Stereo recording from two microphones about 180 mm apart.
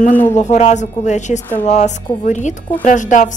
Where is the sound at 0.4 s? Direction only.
40° left (ahead or behind).